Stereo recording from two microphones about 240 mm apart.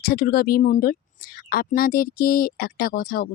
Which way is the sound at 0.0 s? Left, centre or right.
Left.